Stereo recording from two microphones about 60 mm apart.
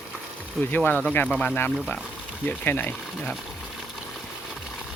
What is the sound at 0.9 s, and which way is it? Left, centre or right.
A man's voice, left.